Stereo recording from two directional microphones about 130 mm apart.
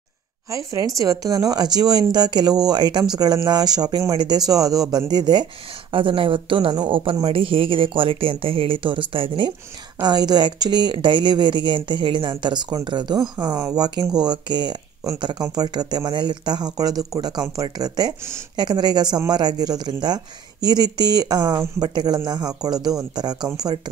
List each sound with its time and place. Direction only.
0.5 s speech: 25° right (ahead or behind); by 9.5 s 40° right (ahead or behind)
10.0 s speech: 30° right (ahead or behind)